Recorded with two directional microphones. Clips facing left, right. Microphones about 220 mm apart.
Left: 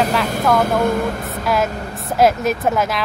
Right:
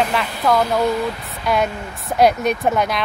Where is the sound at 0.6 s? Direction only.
50° left (ahead or behind).